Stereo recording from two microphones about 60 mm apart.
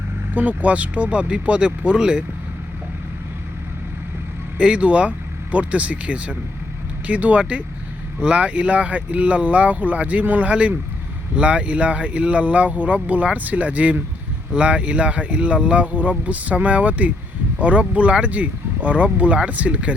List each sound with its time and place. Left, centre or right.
0.3 s speech: right
4.5 s speech: centre